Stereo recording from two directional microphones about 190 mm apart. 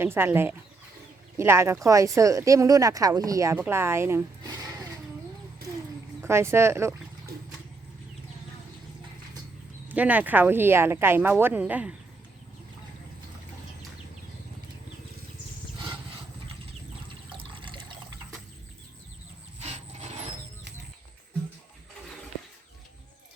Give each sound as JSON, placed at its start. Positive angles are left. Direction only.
{"t": 0.0, "sound": "speech", "side_deg": -10}
{"t": 6.2, "sound": "speech", "side_deg": -15}
{"t": 9.9, "sound": "speech", "side_deg": -10}
{"t": 17.3, "sound": "water", "side_deg": -25}